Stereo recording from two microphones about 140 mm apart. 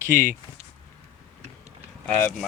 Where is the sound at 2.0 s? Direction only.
10° left (ahead or behind).